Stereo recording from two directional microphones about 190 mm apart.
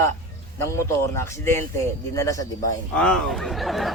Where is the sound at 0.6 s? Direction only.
15° left (ahead or behind).